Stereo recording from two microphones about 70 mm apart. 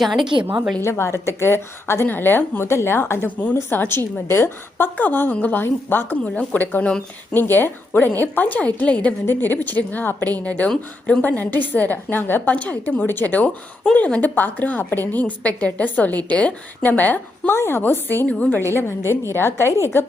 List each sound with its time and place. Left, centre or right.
0.0 s a woman's voice: centre
0.8 s a woman's voice: left
6.2 s a woman's voice: centre
9.2 s a woman's voice: left
17.5 s a woman's voice: left
18.3 s a woman's voice: centre
18.7 s a woman's voice: left